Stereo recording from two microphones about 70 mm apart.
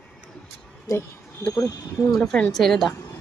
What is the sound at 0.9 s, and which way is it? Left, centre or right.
Speech, left.